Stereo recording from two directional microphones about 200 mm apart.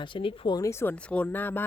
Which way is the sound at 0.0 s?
25° left (ahead or behind).